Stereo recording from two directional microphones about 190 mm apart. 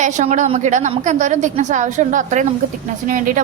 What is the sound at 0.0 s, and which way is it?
A woman's voice, 40° right (ahead or behind).